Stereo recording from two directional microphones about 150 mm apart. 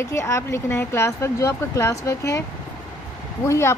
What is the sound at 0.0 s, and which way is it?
Speech, 20° left (ahead or behind).